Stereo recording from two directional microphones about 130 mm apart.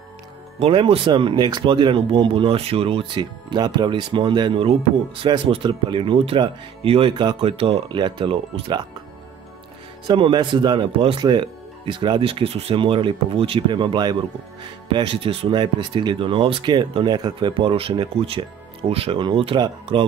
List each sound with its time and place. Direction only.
0.6 s speech: 45° right (ahead or behind)
3.2 s speech: 35° right (ahead or behind)
10.0 s speech: 40° right (ahead or behind)
11.1 s speech: 35° right (ahead or behind)